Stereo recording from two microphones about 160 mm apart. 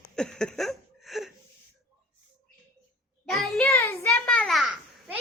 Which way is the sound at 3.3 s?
Centre (ahead or behind).